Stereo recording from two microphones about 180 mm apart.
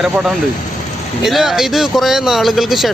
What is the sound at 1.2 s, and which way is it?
Speech, centre (ahead or behind).